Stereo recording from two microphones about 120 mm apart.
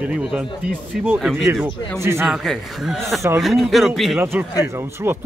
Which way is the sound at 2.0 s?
20° right (ahead or behind).